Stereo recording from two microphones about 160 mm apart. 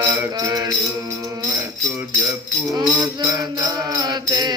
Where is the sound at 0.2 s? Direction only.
20° right (ahead or behind).